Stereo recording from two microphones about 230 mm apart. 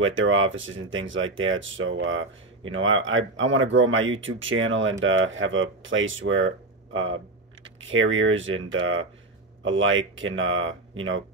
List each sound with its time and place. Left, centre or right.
0.0 s speech: right